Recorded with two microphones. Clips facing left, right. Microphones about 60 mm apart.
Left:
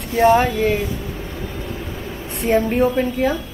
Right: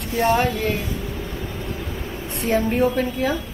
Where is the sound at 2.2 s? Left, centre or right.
Centre.